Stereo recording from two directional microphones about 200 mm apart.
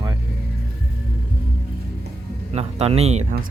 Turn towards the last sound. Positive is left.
turn(degrees=-35)  # may be behind; listen again after turning